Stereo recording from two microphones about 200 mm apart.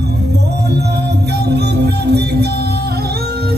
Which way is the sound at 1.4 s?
55° right (ahead or behind).